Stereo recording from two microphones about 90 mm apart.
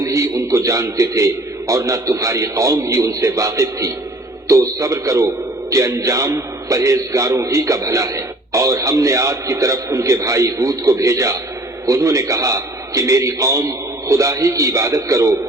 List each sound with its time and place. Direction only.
0.0 s a man's voice: 35° right (ahead or behind)